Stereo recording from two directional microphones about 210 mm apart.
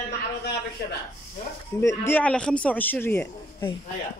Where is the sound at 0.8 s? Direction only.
50° left (ahead or behind).